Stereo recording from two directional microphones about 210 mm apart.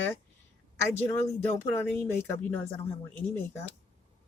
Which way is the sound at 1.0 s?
10° left (ahead or behind).